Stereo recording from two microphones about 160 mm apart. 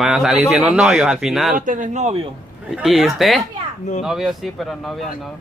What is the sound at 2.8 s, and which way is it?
Speech, centre (ahead or behind).